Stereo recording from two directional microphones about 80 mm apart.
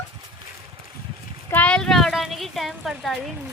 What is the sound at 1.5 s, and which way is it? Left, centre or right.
Speech, centre.